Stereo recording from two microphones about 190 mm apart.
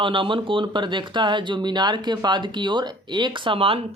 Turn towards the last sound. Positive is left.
turn(degrees=-30)  # may be behind; listen again after turning